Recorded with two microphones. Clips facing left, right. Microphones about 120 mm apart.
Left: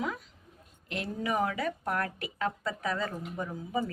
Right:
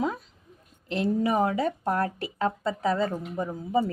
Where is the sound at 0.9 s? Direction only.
35° right (ahead or behind).